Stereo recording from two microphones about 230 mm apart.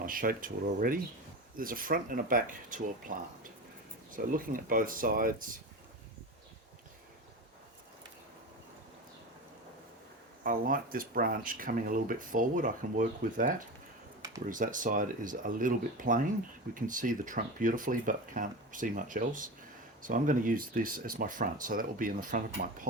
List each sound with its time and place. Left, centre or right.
0.0 s speech: right
10.4 s speech: right